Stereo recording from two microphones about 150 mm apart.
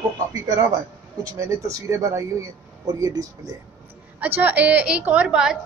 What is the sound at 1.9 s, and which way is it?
Speech, 20° right (ahead or behind).